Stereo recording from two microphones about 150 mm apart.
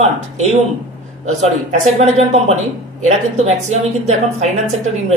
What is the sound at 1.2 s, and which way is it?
A woman's voice, 50° right (ahead or behind).